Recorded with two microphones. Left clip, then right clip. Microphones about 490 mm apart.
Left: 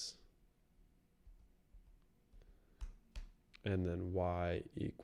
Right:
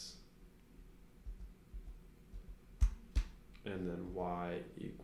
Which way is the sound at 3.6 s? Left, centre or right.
Left.